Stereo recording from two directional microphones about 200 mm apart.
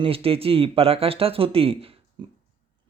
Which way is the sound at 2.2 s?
25° right (ahead or behind).